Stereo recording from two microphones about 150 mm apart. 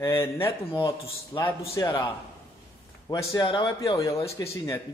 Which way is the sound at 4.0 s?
20° left (ahead or behind).